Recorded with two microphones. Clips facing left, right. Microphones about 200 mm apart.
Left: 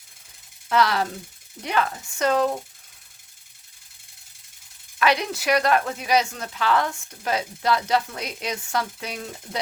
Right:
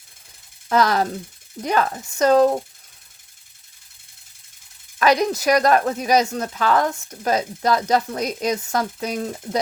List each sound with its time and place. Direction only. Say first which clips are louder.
0.7 s speech: right 3 dB; 40° right (ahead or behind)
4.9 s speech: right 5 dB; 40° right (ahead or behind)